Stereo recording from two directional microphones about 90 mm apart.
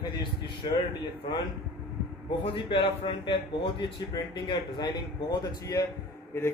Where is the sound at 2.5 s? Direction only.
75° left (ahead or behind).